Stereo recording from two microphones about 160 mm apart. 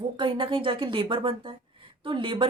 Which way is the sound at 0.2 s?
30° right (ahead or behind).